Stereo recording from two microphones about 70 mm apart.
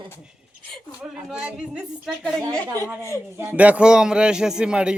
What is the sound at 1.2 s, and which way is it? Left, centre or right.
Speech, centre.